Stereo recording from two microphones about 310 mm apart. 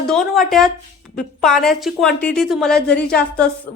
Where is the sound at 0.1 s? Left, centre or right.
Centre.